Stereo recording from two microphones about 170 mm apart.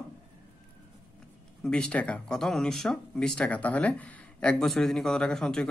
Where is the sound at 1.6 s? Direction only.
5° left (ahead or behind).